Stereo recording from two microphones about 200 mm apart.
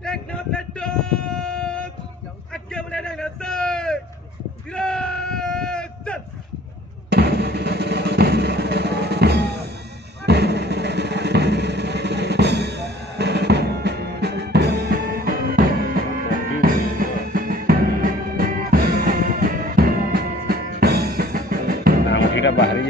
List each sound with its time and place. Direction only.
0.0 s a sound: 5° left (ahead or behind)
7.1 s music: 55° right (ahead or behind)
22.1 s music: 65° left (ahead or behind)